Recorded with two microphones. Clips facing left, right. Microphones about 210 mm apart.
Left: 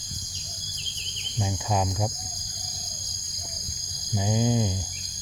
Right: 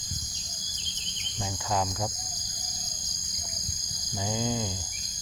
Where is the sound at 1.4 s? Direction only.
15° left (ahead or behind).